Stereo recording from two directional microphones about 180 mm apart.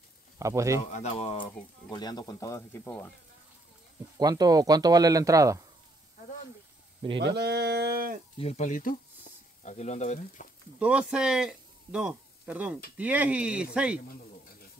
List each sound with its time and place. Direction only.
0.4 s speech: 15° right (ahead or behind)
0.9 s speech: 35° left (ahead or behind); by 3.1 s 15° left (ahead or behind)
4.2 s speech: 20° right (ahead or behind)
7.0 s speech: 30° right (ahead or behind)
7.3 s a sound: 65° right (ahead or behind)
8.4 s speech: 35° left (ahead or behind)
10.8 s speech: 5° right (ahead or behind)